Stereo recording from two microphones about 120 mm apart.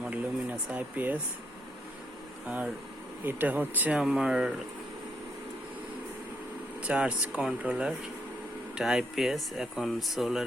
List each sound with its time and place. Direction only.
0.0 s a sound: 10° right (ahead or behind)
2.5 s speech: 10° right (ahead or behind)
6.8 s speech: 10° right (ahead or behind)